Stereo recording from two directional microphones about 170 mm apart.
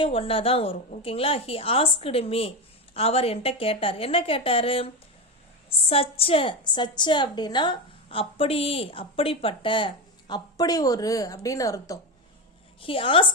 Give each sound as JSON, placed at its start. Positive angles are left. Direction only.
{"t": 0.0, "sound": "a woman's voice", "side_deg": 35}
{"t": 5.9, "sound": "a woman's voice", "side_deg": 35}
{"t": 12.8, "sound": "a woman's voice", "side_deg": 30}